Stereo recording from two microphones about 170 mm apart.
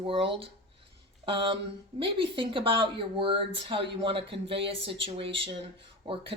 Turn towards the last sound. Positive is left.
turn(degrees=-30)  # may be behind; listen again after turning